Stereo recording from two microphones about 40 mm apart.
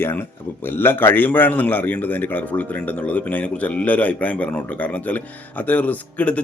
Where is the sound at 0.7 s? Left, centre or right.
Left.